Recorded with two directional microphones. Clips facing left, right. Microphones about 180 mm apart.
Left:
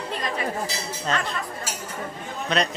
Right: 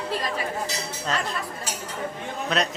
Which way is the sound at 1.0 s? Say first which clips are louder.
Left 2 dB; centre (ahead or behind).